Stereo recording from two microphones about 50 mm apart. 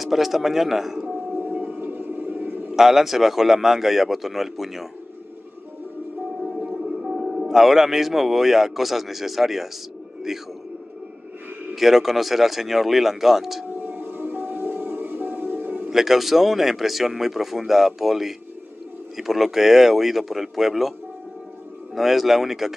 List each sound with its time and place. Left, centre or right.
0.0 s speech: centre
1.0 s a sound: right
2.7 s speech: centre
6.4 s speech: right; by 9.7 s centre
11.7 s speech: centre
13.7 s music: right
15.9 s speech: centre
21.9 s speech: centre